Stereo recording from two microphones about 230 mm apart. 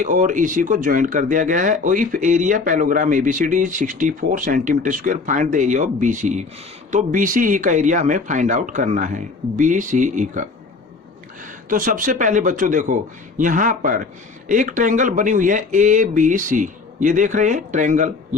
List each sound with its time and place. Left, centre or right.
0.0 s speech: right
11.7 s speech: right